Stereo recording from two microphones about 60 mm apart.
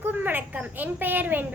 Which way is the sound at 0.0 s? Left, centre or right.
Right.